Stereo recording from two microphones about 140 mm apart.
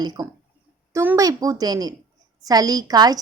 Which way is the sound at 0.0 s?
30° right (ahead or behind).